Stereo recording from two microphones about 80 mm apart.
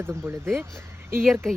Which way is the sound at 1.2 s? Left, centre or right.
Centre.